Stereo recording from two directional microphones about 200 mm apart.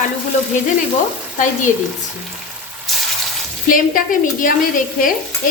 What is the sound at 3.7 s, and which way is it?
Speech, 45° left (ahead or behind).